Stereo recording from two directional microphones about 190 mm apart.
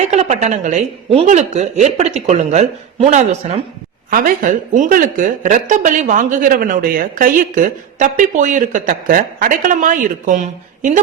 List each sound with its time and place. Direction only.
0.0 s a woman's voice: 40° right (ahead or behind)